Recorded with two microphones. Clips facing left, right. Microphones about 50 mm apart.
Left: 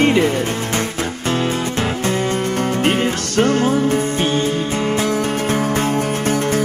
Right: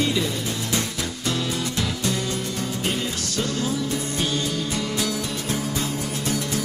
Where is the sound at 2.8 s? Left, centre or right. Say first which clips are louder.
Left 9 dB; left.